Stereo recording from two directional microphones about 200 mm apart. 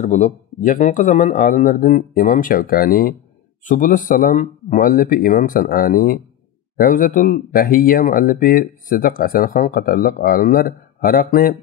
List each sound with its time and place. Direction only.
0.0 s speech: 35° left (ahead or behind)